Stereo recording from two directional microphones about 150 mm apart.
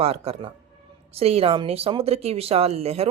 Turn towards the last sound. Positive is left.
turn(degrees=-45)  # may be behind; listen again after turning